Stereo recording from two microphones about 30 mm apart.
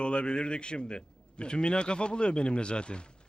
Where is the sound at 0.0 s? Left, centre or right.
Left.